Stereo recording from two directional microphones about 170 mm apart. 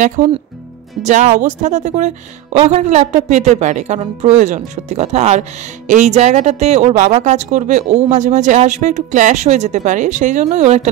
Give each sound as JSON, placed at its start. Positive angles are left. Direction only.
{"t": 0.0, "sound": "speech", "side_deg": -45}